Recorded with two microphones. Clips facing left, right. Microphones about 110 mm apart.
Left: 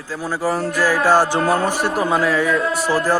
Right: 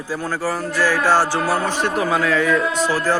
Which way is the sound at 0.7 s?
15° left (ahead or behind).